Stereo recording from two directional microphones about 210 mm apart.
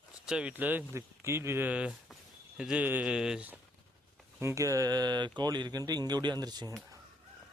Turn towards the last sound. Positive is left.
turn(degrees=-20)  # may be behind; listen again after turning